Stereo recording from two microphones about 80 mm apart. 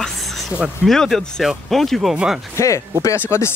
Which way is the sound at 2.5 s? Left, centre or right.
Left.